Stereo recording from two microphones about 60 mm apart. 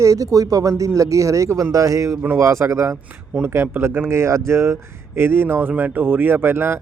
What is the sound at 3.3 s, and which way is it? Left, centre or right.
Speech, right.